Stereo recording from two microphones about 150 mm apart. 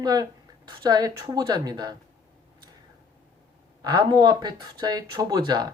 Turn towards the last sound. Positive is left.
turn(degrees=-25)  # may be behind; listen again after turning